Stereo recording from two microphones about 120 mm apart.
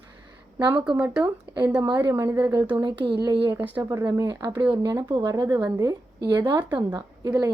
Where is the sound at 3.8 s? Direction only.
25° right (ahead or behind).